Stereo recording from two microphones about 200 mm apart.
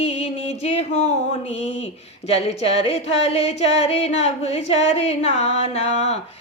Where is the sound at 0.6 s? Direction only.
30° left (ahead or behind).